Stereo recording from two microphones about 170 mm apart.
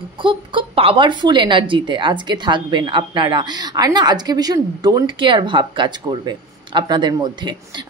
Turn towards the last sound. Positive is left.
turn(degrees=-25)  # may be behind; listen again after turning